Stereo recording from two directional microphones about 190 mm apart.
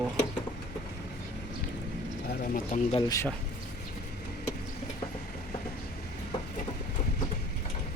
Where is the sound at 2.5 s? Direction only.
40° left (ahead or behind).